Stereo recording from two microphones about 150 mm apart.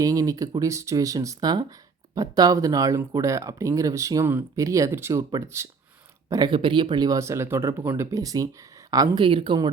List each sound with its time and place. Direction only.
0.0 s speech: 20° right (ahead or behind)
9.2 s speech: 35° right (ahead or behind)